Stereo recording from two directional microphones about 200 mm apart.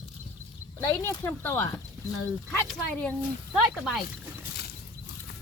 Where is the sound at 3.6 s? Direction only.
Centre (ahead or behind).